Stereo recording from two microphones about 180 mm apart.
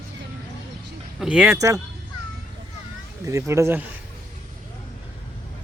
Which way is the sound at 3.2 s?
15° right (ahead or behind).